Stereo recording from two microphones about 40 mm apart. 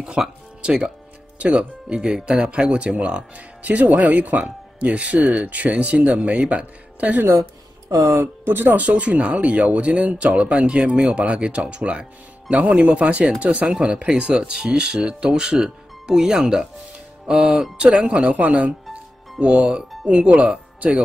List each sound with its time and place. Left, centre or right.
0.0 s speech: centre
3.6 s speech: right
8.2 s speech: right
8.7 s speech: right
19.4 s speech: right